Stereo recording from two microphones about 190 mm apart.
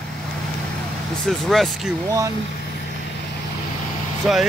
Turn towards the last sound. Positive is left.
turn(degrees=0)  # may be behind; listen again after turning